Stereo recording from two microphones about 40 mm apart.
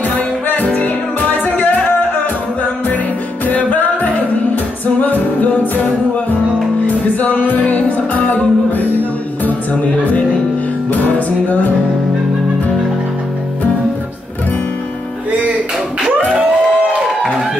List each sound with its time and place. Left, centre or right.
0.5 s music: left
3.4 s music: left
7.2 s music: left
10.9 s music: left